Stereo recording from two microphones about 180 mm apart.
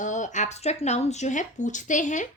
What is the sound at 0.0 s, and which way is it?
Speech, 45° left (ahead or behind).